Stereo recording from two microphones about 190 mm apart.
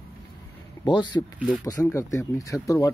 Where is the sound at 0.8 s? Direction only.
20° left (ahead or behind).